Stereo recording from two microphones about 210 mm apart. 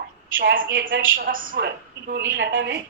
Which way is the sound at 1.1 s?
40° right (ahead or behind).